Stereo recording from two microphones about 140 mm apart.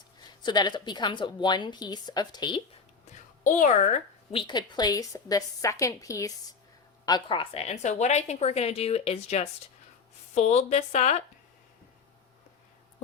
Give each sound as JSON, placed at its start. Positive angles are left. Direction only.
{"t": 0.4, "sound": "a woman's voice", "side_deg": 30}
{"t": 3.4, "sound": "a woman's voice", "side_deg": 65}
{"t": 4.4, "sound": "a woman's voice", "side_deg": 30}